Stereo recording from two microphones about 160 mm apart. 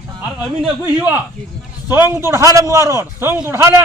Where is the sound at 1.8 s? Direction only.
10° right (ahead or behind).